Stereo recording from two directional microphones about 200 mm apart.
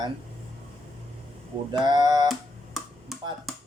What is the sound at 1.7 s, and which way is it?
Speech, 20° right (ahead or behind).